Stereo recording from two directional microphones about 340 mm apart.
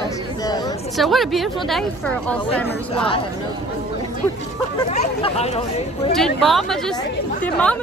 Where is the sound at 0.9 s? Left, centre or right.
Centre.